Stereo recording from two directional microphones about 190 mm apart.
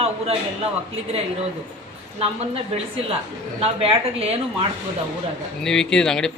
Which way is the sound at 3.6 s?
30° right (ahead or behind).